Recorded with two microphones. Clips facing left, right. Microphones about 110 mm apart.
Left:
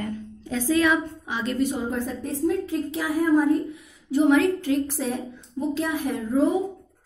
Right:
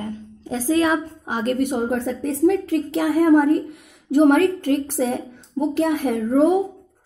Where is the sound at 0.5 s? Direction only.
35° right (ahead or behind).